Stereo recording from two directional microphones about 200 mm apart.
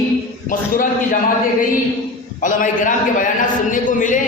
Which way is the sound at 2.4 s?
40° left (ahead or behind).